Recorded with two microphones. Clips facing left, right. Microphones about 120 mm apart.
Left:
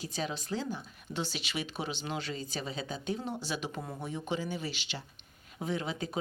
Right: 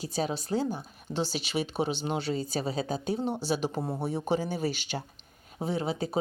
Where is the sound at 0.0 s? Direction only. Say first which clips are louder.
Right 5 dB; 35° right (ahead or behind).